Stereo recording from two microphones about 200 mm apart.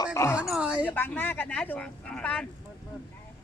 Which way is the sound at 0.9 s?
10° left (ahead or behind).